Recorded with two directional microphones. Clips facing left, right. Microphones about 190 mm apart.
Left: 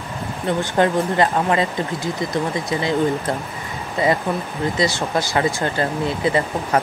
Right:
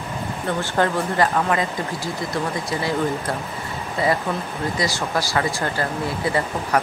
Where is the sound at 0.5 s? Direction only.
20° left (ahead or behind).